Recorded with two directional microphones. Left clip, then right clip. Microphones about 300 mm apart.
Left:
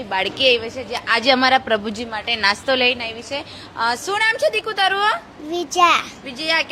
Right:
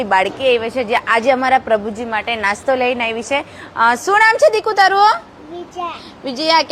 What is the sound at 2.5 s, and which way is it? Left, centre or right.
Speech, centre.